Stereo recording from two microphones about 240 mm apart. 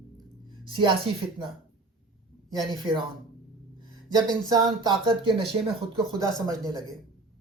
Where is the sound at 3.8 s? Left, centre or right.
Centre.